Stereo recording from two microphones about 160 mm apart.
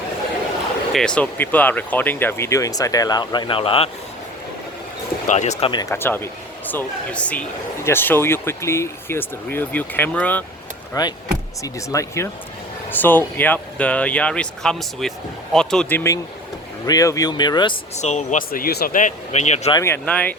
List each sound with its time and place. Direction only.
0.9 s speech: 5° left (ahead or behind); by 3.8 s 35° left (ahead or behind)
5.2 s speech: 50° left (ahead or behind)
5.8 s speech: 15° left (ahead or behind)
11.0 s speech: 25° left (ahead or behind)
16.8 s speech: 20° left (ahead or behind)
17.9 s speech: 45° left (ahead or behind); by 18.9 s 75° left (ahead or behind)
18.9 s speech: 50° left (ahead or behind)
19.7 s speech: 15° left (ahead or behind)